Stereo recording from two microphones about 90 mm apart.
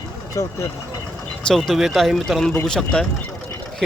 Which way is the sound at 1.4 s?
5° left (ahead or behind).